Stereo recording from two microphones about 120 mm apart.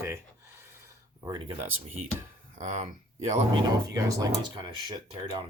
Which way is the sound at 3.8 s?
30° right (ahead or behind).